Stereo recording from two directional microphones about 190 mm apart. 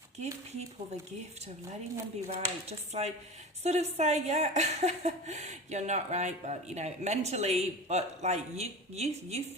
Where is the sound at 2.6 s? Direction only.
35° right (ahead or behind).